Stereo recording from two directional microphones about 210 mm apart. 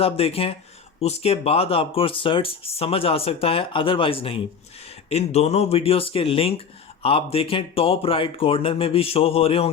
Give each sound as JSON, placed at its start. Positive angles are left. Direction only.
{"t": 0.0, "sound": "speech", "side_deg": 25}